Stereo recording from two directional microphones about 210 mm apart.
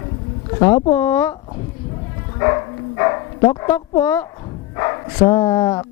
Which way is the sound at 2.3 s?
20° left (ahead or behind).